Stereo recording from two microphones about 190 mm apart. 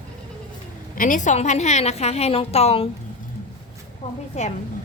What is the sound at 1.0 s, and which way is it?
A woman's voice, 40° left (ahead or behind).